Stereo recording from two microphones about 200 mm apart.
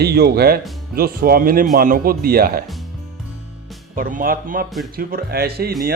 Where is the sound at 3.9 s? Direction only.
45° right (ahead or behind).